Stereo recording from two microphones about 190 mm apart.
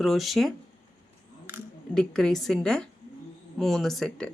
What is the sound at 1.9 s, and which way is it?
Speech, 5° left (ahead or behind).